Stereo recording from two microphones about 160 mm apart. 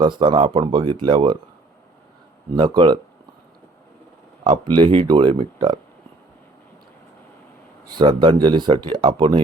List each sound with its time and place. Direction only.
0.0 s speech: 30° right (ahead or behind)
2.6 s speech: 30° right (ahead or behind)
4.4 s speech: 30° right (ahead or behind)
7.9 s speech: 30° right (ahead or behind)